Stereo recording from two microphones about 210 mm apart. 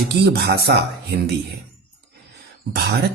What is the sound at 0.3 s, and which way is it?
Speech, 50° right (ahead or behind).